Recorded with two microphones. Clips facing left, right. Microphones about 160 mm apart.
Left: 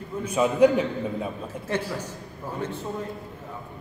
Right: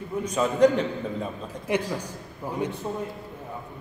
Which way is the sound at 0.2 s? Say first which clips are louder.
Left 1 dB; 10° left (ahead or behind).